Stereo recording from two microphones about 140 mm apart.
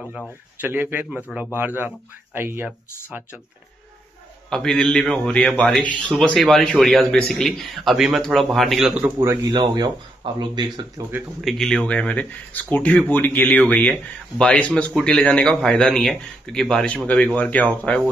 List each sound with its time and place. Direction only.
0.6 s a man's voice: 15° right (ahead or behind)
4.5 s a man's voice: 5° left (ahead or behind)
9.0 s speech: 20° right (ahead or behind)
11.0 s a man's voice: 15° right (ahead or behind)
11.4 s a man's voice: 5° left (ahead or behind)